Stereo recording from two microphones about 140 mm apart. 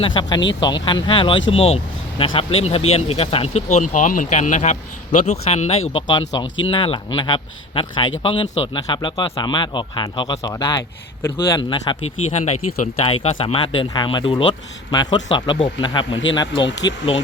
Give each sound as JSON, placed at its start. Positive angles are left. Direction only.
{"t": 0.0, "sound": "speech", "side_deg": 35}
{"t": 11.9, "sound": "speech", "side_deg": 35}
{"t": 12.3, "sound": "speech", "side_deg": 55}